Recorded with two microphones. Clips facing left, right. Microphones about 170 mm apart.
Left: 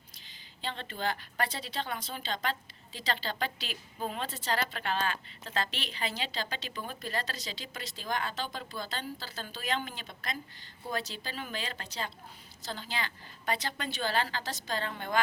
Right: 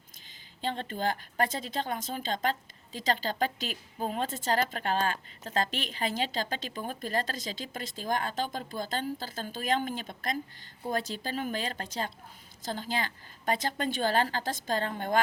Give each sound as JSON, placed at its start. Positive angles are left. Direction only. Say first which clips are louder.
{"t": 0.3, "sound": "a woman's voice", "louder": "right 5 dB", "side_deg": -50}